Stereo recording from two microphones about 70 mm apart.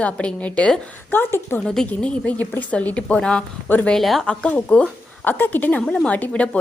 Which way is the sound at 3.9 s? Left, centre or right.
Centre.